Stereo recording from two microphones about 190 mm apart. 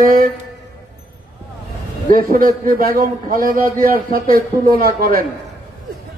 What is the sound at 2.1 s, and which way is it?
A man's voice, 50° right (ahead or behind).